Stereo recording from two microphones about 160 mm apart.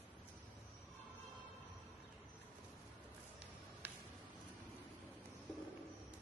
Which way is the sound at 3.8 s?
90° right.